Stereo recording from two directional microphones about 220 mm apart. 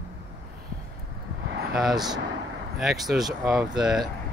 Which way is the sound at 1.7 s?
Centre (ahead or behind).